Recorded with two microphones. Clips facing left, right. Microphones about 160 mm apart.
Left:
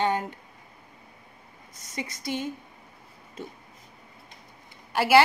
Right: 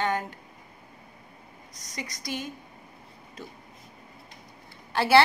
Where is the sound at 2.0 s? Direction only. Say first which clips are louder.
Left 3 dB; 25° left (ahead or behind).